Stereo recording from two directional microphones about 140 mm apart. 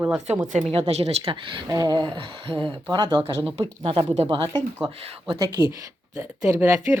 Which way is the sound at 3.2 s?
20° right (ahead or behind).